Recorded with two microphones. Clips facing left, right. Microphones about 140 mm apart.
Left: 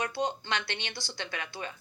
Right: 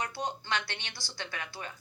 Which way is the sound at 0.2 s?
20° left (ahead or behind).